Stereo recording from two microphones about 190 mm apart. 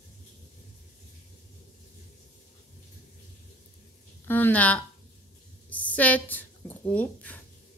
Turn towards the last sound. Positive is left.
turn(degrees=10)  # may be behind; listen again after turning